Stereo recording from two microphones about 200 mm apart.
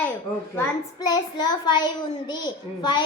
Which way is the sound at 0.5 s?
20° left (ahead or behind).